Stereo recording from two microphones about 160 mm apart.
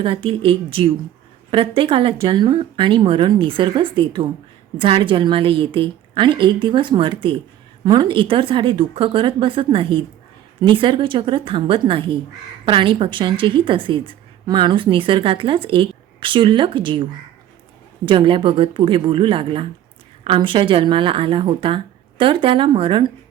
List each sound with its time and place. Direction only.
0.0 s a woman's voice: 35° right (ahead or behind)